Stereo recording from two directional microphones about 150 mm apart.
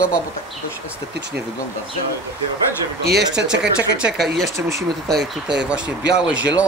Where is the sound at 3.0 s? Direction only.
90° right.